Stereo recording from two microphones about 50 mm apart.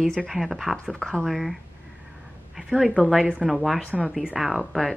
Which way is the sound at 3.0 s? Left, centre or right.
Left.